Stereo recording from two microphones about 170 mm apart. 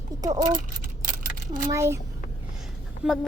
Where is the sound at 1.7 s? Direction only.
15° right (ahead or behind).